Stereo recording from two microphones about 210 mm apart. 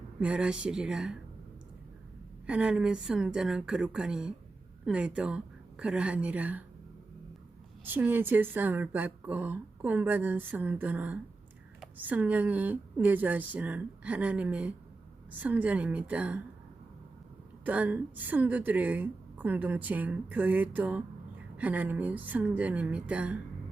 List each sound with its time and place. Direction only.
0.2 s a woman's voice: 5° right (ahead or behind)
2.5 s a woman's voice: 5° right (ahead or behind)
7.9 s a woman's voice: 10° right (ahead or behind)
17.7 s a woman's voice: 5° right (ahead or behind)